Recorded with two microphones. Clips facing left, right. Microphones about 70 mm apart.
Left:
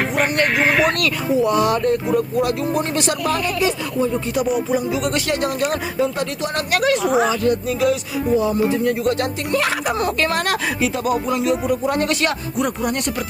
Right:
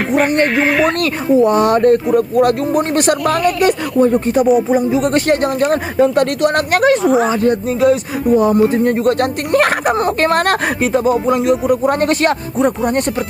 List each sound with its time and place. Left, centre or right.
0.4 s speech: centre
0.9 s speech: right
6.1 s speech: right
7.0 s speech: centre
7.3 s speech: right
8.4 s speech: right